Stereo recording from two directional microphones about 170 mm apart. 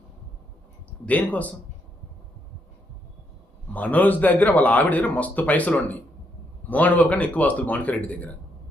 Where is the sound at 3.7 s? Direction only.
10° left (ahead or behind).